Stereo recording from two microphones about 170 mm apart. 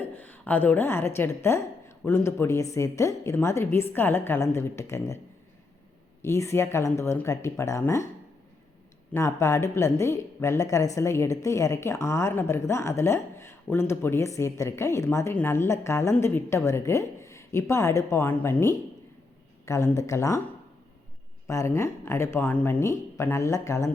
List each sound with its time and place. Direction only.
0.0 s speech: 10° left (ahead or behind)
6.2 s speech: 15° left (ahead or behind)
9.1 s speech: 15° left (ahead or behind)
21.4 s speech: 15° left (ahead or behind)